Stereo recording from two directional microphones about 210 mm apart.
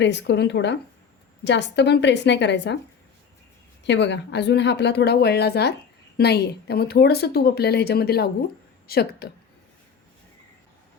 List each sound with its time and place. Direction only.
0.0 s a woman's voice: 55° left (ahead or behind)
3.8 s a woman's voice: 55° left (ahead or behind)